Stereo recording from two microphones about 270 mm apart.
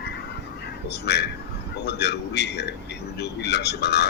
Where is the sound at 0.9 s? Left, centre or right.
Left.